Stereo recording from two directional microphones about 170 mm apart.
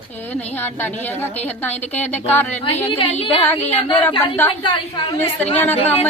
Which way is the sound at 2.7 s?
35° left (ahead or behind).